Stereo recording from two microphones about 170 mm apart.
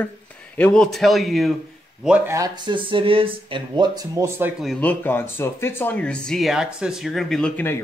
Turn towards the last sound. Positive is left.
turn(degrees=10)  # may be behind; listen again after turning